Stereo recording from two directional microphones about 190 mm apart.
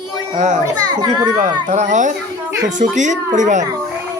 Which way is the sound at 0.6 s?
20° right (ahead or behind).